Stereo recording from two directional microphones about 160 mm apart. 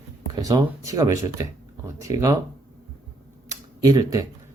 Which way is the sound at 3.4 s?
25° right (ahead or behind).